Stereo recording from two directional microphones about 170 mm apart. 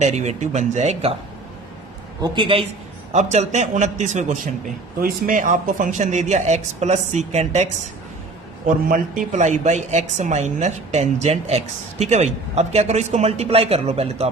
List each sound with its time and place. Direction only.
0.0 s speech: 40° right (ahead or behind)
2.2 s a man's voice: 30° right (ahead or behind)
3.1 s speech: 45° right (ahead or behind)
4.9 s speech: 55° right (ahead or behind); by 14.3 s 35° right (ahead or behind)